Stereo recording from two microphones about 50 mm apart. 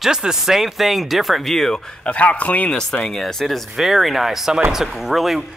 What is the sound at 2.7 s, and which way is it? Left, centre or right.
Speech, centre.